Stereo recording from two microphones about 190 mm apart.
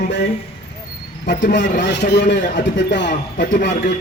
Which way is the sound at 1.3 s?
65° left (ahead or behind).